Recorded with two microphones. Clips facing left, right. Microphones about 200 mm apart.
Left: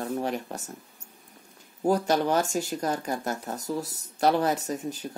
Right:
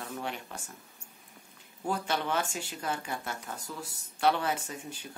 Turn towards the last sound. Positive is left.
turn(degrees=40)  # may be behind; listen again after turning